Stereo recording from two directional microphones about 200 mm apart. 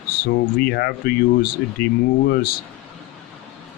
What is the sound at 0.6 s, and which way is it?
Speech, 50° left (ahead or behind).